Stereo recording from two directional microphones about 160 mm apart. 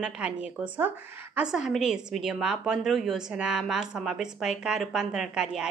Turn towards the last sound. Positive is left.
turn(degrees=-5)  # may be behind; listen again after turning